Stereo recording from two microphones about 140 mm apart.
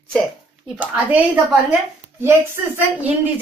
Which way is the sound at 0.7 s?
10° right (ahead or behind).